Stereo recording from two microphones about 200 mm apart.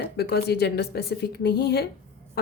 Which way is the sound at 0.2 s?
55° left (ahead or behind).